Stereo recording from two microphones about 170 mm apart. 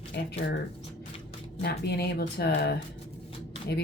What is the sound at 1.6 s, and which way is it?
Speech, 70° left (ahead or behind).